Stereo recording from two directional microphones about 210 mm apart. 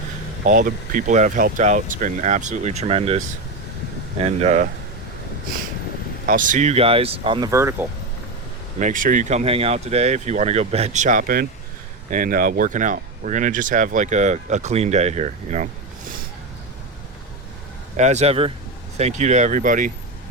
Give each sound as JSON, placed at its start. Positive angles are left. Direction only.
{"t": 0.4, "sound": "speech", "side_deg": -40}
{"t": 6.2, "sound": "speech", "side_deg": -40}
{"t": 8.8, "sound": "speech", "side_deg": -40}
{"t": 17.9, "sound": "speech", "side_deg": -35}